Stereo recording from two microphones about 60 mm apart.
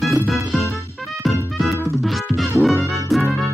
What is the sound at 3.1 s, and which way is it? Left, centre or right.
Music, centre.